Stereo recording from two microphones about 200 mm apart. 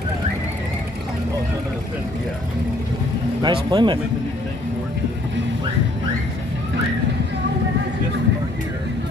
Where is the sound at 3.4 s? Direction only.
20° right (ahead or behind).